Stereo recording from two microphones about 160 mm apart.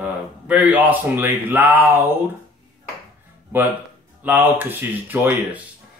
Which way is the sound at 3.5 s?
10° right (ahead or behind).